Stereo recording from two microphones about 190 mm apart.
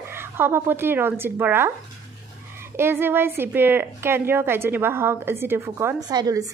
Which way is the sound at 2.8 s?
10° right (ahead or behind).